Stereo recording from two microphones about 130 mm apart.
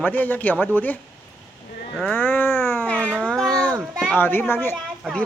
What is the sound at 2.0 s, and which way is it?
Cat, 15° left (ahead or behind).